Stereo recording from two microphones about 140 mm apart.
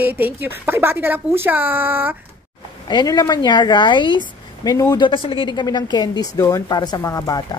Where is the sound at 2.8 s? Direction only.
30° left (ahead or behind).